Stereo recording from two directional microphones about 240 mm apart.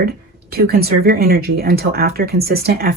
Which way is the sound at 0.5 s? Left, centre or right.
Right.